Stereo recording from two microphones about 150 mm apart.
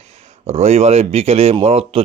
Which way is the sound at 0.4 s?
45° right (ahead or behind).